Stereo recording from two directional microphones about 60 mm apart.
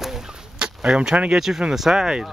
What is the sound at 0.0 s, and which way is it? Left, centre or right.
Fowl, centre.